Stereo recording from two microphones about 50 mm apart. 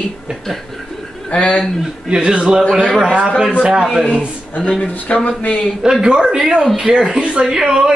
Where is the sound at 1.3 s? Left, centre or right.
Left.